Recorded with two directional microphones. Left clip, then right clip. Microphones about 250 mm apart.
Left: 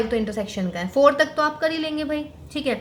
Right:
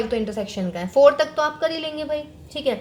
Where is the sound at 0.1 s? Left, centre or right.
Right.